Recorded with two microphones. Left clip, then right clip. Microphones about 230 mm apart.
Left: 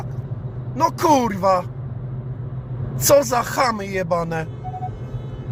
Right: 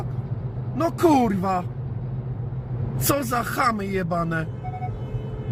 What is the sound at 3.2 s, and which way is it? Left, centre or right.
Speech, left.